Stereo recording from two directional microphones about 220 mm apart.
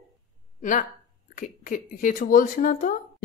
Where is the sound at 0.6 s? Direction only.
35° left (ahead or behind).